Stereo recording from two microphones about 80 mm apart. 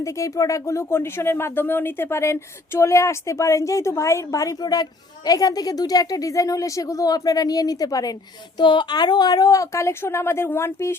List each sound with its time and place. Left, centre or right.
0.0 s speech: left
4.6 s a woman's voice: left
8.5 s speech: left